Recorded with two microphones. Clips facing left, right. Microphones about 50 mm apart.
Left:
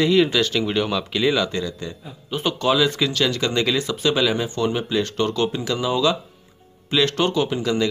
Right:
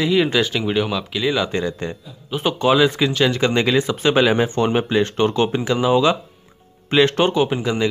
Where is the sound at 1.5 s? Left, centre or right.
Right.